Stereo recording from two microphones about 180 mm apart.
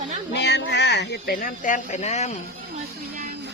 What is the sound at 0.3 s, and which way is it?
Speech, 70° left (ahead or behind).